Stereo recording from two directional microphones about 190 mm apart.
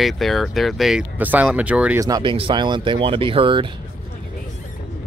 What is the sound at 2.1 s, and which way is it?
Speech, 25° right (ahead or behind).